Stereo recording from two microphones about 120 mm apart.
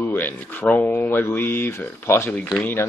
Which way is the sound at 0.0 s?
15° left (ahead or behind).